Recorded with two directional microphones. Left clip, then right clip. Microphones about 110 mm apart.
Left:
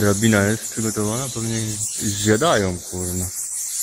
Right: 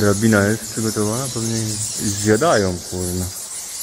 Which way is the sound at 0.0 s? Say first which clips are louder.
Right 2 dB; 20° left (ahead or behind).